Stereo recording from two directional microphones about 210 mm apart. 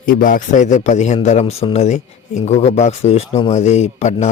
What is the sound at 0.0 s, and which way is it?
A man's voice, 40° left (ahead or behind).